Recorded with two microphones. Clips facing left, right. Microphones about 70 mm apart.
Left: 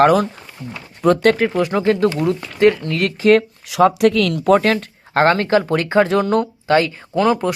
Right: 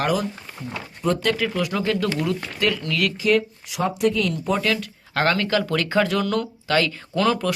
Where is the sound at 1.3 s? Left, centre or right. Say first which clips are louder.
Left 6 dB; left.